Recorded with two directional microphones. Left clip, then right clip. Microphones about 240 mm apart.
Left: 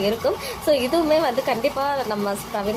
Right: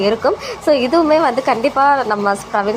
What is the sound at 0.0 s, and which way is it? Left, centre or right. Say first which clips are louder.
A woman's voice: right 7 dB; centre.